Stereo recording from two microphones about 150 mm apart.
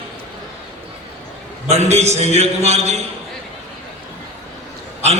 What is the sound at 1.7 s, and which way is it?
A man's voice, 45° right (ahead or behind).